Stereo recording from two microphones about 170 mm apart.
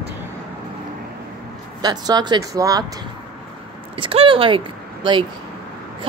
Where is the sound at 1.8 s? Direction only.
25° right (ahead or behind).